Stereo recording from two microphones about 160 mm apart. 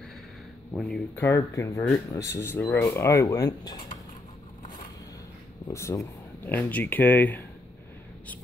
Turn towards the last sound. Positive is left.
turn(degrees=10)  # may be behind; listen again after turning